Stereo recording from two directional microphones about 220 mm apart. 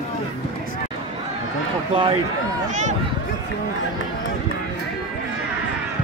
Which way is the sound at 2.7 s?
35° right (ahead or behind).